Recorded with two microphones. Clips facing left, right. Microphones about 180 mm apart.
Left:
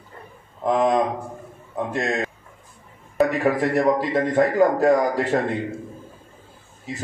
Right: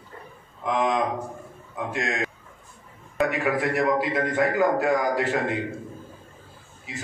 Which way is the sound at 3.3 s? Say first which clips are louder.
Left 4 dB; 35° left (ahead or behind).